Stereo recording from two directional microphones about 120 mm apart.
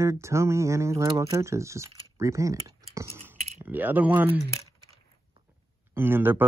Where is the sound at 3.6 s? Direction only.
15° right (ahead or behind).